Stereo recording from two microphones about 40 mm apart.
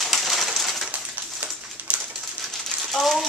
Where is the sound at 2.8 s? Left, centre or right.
Centre.